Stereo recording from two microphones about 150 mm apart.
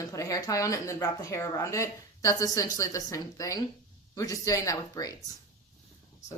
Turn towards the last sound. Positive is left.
turn(degrees=20)  # may be behind; listen again after turning